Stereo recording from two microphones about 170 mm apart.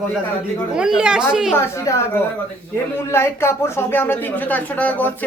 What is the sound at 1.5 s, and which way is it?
Speech, 15° left (ahead or behind).